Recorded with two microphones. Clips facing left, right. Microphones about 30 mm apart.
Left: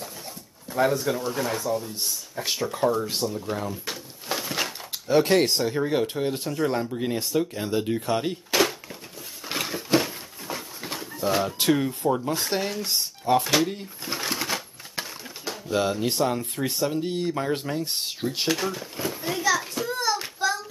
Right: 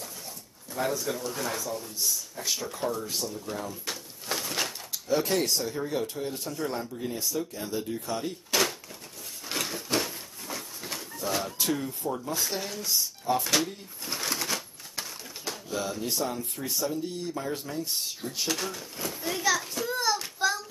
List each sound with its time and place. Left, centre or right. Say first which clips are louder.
0.7 s speech: left 7 dB; left
2.0 s speech: left 1 dB; left
3.8 s a sound: left 2 dB; centre
4.9 s speech: left 7 dB; left
8.5 s cap gun: left 4 dB; centre
9.5 s a sound: left 6 dB; centre
11.5 s speech: left 7 dB; left
13.4 s speech: left 4 dB; centre
14.0 s a sound: left 3 dB; left
15.7 s speech: left 8 dB; left
18.5 s speech: left 6 dB; centre
19.3 s a sound: left 3 dB; centre
19.6 s child singing: left 2 dB; centre